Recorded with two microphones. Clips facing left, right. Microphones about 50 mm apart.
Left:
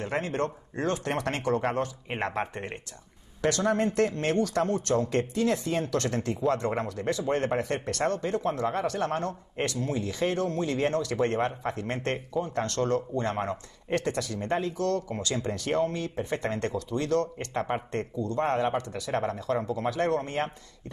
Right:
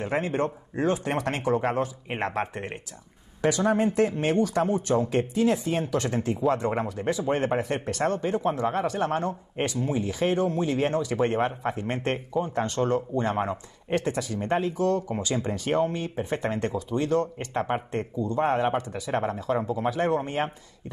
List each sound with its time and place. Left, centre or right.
0.0 s speech: centre